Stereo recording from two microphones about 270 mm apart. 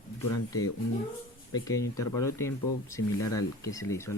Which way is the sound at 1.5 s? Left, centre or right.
Centre.